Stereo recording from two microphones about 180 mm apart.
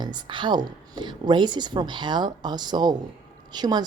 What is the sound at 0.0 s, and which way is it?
A woman's voice, 25° right (ahead or behind).